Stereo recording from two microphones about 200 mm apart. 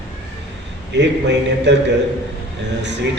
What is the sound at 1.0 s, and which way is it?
Speech, 60° right (ahead or behind).